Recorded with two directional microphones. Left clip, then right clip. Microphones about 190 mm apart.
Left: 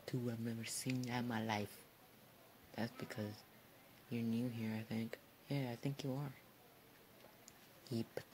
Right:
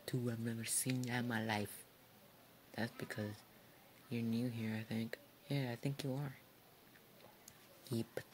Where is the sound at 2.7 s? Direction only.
15° right (ahead or behind).